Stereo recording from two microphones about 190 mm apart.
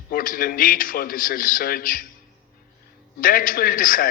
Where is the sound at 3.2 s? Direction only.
45° left (ahead or behind).